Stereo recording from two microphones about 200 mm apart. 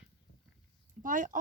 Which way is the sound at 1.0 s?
40° right (ahead or behind).